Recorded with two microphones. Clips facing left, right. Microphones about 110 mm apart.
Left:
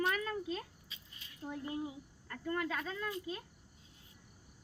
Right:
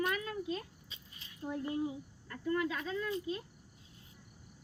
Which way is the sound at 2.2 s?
45° left (ahead or behind).